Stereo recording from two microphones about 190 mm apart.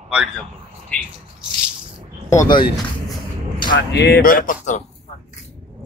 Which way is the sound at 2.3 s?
20° left (ahead or behind).